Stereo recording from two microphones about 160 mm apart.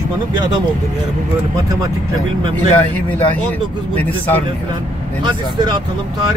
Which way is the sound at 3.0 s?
10° left (ahead or behind).